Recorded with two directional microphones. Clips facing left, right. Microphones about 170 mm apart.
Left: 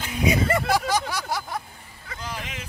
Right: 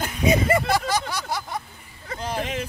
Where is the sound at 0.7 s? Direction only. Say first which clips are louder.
Even; 10° left (ahead or behind).